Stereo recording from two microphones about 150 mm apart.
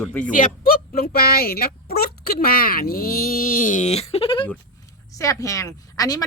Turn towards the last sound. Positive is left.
turn(degrees=25)  # may be behind; listen again after turning